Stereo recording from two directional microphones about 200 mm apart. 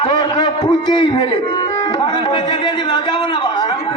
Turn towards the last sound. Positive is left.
turn(degrees=25)  # may be behind; listen again after turning